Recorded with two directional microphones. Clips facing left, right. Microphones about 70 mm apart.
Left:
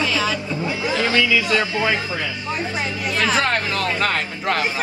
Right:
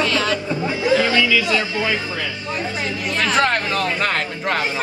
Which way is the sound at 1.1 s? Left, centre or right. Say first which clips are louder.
Even; left.